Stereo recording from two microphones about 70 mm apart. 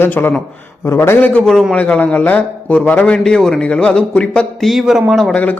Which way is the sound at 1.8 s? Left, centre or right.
Left.